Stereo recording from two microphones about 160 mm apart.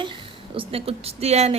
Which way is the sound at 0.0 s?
30° right (ahead or behind).